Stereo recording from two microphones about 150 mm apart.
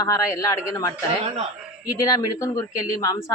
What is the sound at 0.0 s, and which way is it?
Speech, 25° left (ahead or behind).